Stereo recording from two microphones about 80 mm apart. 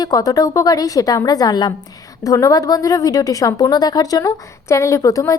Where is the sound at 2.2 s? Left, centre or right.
Left.